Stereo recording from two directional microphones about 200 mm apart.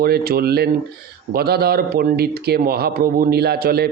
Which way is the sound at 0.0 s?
50° right (ahead or behind).